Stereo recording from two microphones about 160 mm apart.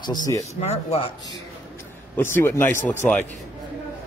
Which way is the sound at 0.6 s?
40° left (ahead or behind).